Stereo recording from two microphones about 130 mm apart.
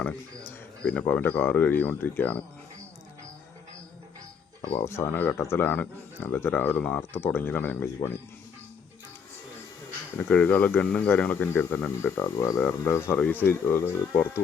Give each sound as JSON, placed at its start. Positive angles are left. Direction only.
{"t": 0.8, "sound": "speech", "side_deg": 10}
{"t": 4.8, "sound": "speech", "side_deg": 20}
{"t": 10.2, "sound": "speech", "side_deg": 15}